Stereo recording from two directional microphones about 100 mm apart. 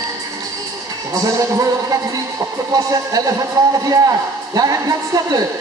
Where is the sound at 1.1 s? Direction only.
35° right (ahead or behind).